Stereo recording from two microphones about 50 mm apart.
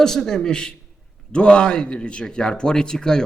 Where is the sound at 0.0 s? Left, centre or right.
Centre.